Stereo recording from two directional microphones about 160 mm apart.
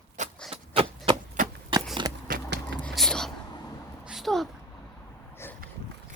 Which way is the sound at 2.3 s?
90° right.